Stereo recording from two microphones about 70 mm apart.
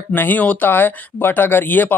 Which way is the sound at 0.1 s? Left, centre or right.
Left.